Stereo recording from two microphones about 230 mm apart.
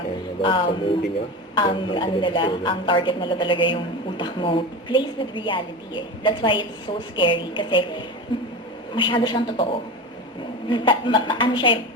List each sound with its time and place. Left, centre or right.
0.4 s a woman's voice: left
10.7 s a woman's voice: left